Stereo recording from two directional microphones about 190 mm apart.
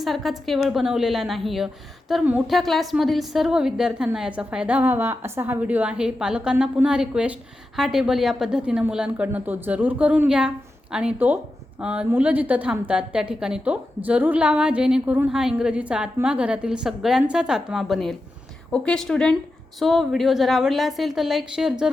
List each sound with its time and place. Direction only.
0.0 s a woman's voice: centre (ahead or behind)